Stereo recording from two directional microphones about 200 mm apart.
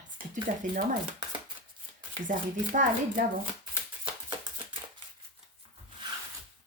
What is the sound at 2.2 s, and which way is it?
Speech, 40° right (ahead or behind).